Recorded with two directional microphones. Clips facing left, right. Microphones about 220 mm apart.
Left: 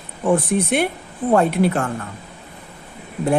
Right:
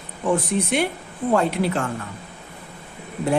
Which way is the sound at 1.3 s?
55° left (ahead or behind).